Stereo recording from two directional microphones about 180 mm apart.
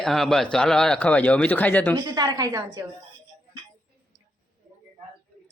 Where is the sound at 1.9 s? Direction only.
20° right (ahead or behind).